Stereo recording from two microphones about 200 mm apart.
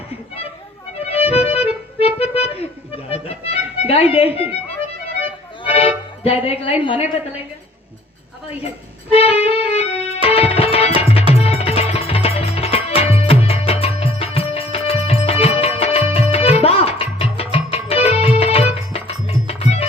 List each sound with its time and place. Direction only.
0.9 s accordion: 30° left (ahead or behind)
5.7 s music: 30° left (ahead or behind)
6.8 s a woman's voice: 25° left (ahead or behind)
9.1 s music: 30° left (ahead or behind)